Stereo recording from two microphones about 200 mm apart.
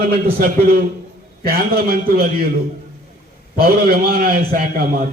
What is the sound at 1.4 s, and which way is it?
A man's voice, 50° right (ahead or behind).